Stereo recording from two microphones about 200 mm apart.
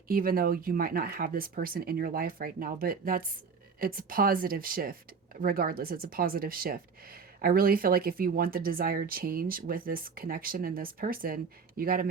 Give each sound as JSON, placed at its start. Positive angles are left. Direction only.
{"t": 0.1, "sound": "speech", "side_deg": -45}